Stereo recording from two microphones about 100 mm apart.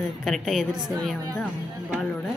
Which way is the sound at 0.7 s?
45° right (ahead or behind).